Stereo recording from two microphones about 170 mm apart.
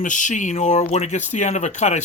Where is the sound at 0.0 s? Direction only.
50° left (ahead or behind).